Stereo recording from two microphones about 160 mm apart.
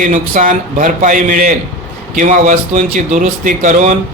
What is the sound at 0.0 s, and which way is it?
Speech, 55° right (ahead or behind).